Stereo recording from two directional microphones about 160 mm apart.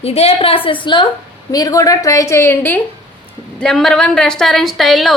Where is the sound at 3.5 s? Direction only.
Centre (ahead or behind).